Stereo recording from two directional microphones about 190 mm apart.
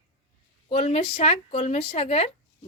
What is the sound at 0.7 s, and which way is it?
Speech, 30° left (ahead or behind).